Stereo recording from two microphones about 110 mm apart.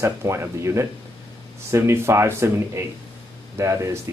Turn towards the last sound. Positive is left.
turn(degrees=-25)  # may be behind; listen again after turning